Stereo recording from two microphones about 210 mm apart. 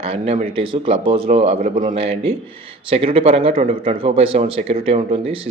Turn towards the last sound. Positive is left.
turn(degrees=-25)  # may be behind; listen again after turning